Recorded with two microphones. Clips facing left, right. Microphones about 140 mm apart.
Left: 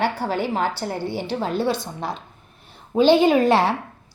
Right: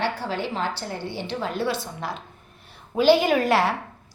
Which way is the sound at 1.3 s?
40° left (ahead or behind).